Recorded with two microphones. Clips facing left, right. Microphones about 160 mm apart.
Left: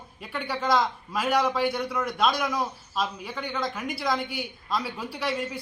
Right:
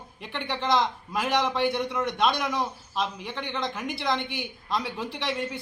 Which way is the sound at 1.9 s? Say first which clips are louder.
Even; centre (ahead or behind).